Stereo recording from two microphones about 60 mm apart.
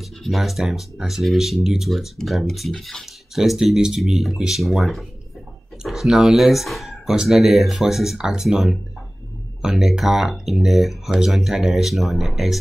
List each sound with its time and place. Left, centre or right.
0.0 s speech: centre
3.3 s speech: centre